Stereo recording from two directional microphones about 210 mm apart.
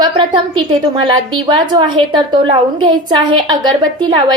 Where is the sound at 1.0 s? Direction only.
25° right (ahead or behind).